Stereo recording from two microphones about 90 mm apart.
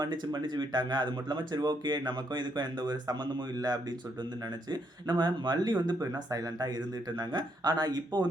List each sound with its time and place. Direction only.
0.0 s speech: 55° right (ahead or behind)
6.0 s speech: 45° right (ahead or behind)